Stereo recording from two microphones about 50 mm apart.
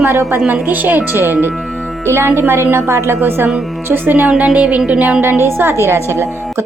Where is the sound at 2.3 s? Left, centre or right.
Right.